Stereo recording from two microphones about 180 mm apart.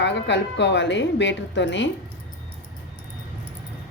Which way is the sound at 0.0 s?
75° left (ahead or behind).